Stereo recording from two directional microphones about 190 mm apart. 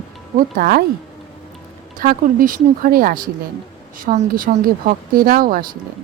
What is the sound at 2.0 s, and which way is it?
Speech, 45° right (ahead or behind).